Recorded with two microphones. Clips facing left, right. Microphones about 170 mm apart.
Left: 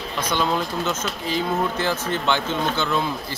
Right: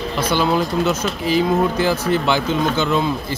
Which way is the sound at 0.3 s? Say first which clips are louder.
Right 5 dB; 5° right (ahead or behind).